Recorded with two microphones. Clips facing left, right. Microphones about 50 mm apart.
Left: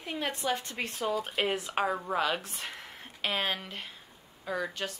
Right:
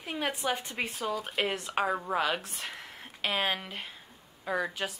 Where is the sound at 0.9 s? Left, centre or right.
Centre.